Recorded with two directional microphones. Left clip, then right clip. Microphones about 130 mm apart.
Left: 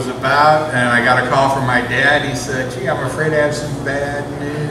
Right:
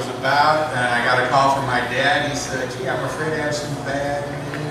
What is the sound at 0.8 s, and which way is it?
A man's voice, 15° left (ahead or behind).